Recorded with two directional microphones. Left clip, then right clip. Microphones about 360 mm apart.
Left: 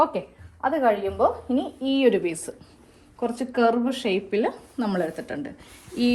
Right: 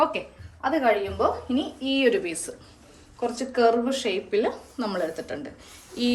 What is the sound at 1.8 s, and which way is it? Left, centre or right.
A woman's voice, centre.